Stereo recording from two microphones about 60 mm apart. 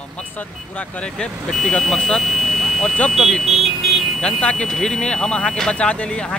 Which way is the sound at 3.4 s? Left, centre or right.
Centre.